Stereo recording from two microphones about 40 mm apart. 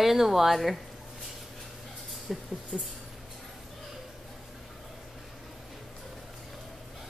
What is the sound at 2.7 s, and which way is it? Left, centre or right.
Speech, centre.